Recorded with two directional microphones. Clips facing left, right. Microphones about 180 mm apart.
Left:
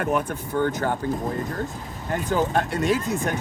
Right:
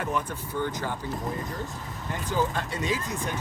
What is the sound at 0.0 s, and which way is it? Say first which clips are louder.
Speech: left 6 dB; 60° left (ahead or behind).